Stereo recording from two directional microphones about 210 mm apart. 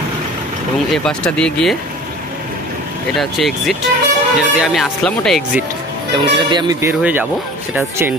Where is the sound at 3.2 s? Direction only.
Centre (ahead or behind).